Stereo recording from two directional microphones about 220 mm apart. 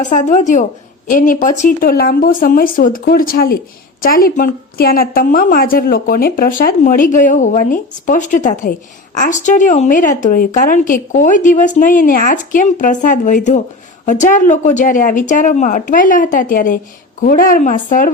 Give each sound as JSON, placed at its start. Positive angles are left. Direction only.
{"t": 0.0, "sound": "a woman's voice", "side_deg": 35}